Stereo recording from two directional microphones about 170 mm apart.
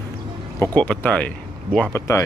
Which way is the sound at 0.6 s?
10° left (ahead or behind).